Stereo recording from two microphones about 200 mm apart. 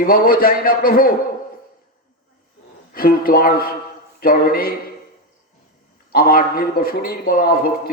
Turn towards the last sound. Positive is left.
turn(degrees=45)  # may be behind; listen again after turning